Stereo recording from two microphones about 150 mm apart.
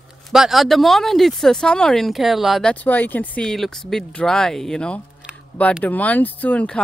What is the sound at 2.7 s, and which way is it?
Speech, 10° left (ahead or behind).